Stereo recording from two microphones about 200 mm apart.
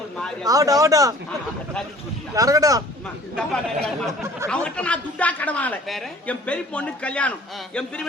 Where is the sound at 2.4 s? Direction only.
15° right (ahead or behind).